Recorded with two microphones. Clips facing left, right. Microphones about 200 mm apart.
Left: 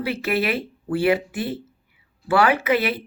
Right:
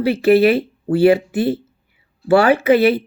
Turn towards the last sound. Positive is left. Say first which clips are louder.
# right 8 dB
turn(degrees=-30)  # may be behind; listen again after turning